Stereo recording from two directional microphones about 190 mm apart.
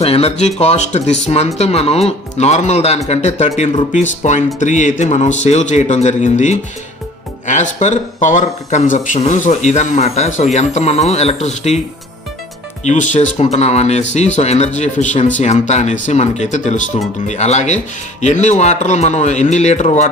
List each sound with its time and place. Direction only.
0.0 s speech: 30° left (ahead or behind)
12.8 s speech: 40° left (ahead or behind)